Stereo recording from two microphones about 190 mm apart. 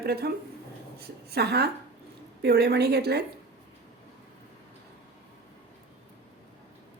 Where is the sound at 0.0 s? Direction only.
55° right (ahead or behind).